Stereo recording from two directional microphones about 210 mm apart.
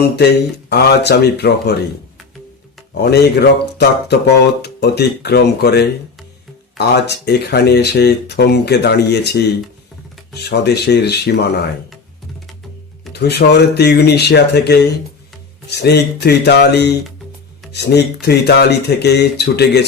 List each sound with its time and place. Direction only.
0.2 s speech: 50° left (ahead or behind)
3.0 s speech: 50° left (ahead or behind)
13.1 s speech: 50° left (ahead or behind)